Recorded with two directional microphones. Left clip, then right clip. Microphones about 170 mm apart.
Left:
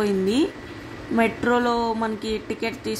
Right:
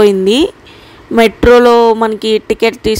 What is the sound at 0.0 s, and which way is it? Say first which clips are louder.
Speech: right 13 dB; 50° right (ahead or behind).